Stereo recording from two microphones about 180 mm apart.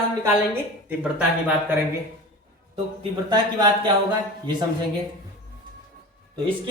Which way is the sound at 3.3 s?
25° right (ahead or behind).